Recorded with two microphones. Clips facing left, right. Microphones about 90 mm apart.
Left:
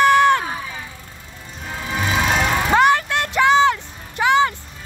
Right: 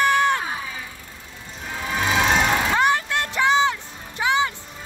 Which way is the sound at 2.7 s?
70° left (ahead or behind).